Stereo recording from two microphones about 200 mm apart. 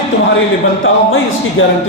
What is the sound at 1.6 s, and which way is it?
Speech, 80° left.